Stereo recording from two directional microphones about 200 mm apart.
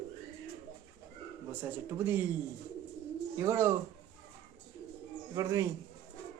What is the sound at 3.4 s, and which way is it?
Speech, 15° right (ahead or behind).